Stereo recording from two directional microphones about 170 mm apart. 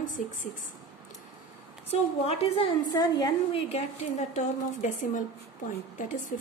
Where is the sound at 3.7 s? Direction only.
45° left (ahead or behind).